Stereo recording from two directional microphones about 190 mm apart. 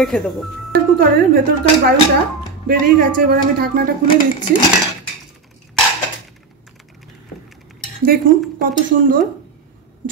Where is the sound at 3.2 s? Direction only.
50° right (ahead or behind).